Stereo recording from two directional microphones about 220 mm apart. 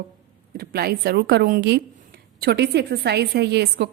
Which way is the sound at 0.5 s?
45° right (ahead or behind).